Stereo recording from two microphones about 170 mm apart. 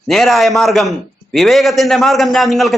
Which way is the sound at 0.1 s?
Centre (ahead or behind).